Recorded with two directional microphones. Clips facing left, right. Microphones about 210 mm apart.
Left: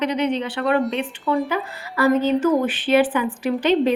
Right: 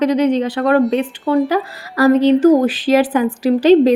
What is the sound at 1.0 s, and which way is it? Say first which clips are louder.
Speech: right 6 dB; 35° right (ahead or behind).